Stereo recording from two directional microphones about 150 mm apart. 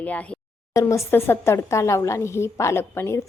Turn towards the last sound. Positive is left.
turn(degrees=15)  # may be behind; listen again after turning